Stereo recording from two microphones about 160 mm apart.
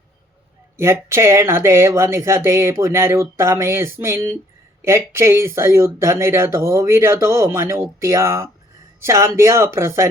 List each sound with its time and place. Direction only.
0.8 s speech: 15° right (ahead or behind)